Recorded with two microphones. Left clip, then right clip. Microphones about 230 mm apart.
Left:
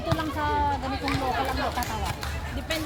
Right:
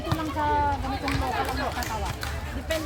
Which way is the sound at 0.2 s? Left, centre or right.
Left.